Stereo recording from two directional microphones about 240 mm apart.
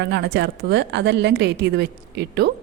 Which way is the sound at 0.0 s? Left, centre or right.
Right.